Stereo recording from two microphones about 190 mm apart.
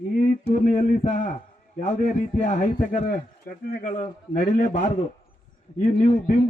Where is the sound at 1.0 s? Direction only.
40° left (ahead or behind).